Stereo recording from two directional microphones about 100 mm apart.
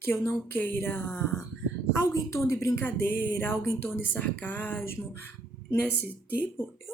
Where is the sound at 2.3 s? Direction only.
30° left (ahead or behind).